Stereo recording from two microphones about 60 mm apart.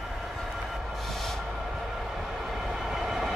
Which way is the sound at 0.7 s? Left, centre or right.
Centre.